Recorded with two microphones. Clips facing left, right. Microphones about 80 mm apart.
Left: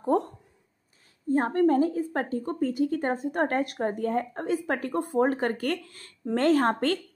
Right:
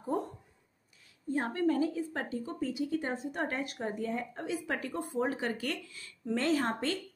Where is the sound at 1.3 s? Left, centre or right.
Left.